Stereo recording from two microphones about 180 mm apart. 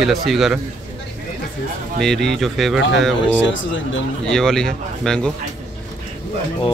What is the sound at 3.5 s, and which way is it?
Speech, 90° left.